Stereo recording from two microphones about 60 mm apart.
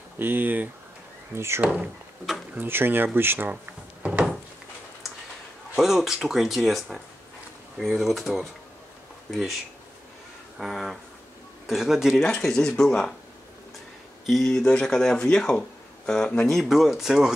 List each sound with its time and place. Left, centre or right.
0.2 s speech: right
1.3 s speech: right
2.5 s speech: right
4.0 s a sound: right
5.8 s speech: centre
9.3 s speech: centre
10.6 s speech: centre
12.2 s speech: centre
14.2 s speech: centre
14.5 s speech: centre
16.4 s speech: centre